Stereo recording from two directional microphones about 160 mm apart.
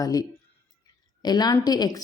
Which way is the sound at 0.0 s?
20° left (ahead or behind).